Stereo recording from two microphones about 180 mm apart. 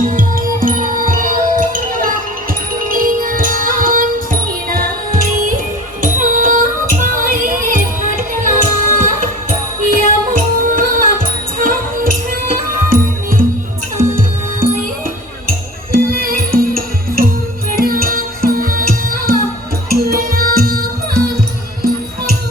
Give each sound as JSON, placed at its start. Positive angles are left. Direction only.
{"t": 0.1, "sound": "music", "side_deg": -50}